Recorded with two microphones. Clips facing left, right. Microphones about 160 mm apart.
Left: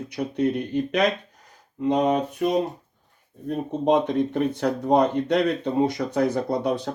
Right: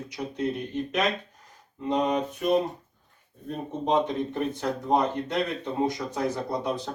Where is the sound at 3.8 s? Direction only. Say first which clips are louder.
Left 4 dB; 70° left (ahead or behind).